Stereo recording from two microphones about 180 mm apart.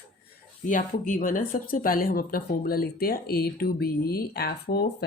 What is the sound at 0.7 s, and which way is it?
Speech, 45° left (ahead or behind).